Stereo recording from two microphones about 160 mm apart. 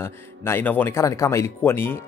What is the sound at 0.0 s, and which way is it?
Speech, 15° left (ahead or behind).